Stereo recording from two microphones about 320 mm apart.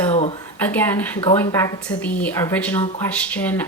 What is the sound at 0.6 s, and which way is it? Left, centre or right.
Speech, centre.